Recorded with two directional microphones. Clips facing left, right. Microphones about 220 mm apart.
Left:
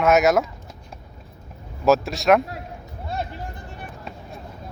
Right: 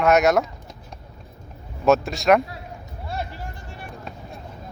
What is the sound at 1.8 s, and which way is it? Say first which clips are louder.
Speech: even; centre (ahead or behind).